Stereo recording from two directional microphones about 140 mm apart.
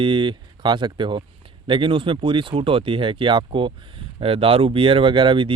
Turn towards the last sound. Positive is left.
turn(degrees=-35)  # may be behind; listen again after turning